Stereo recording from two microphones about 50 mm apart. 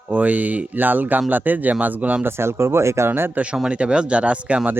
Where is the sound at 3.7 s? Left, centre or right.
Right.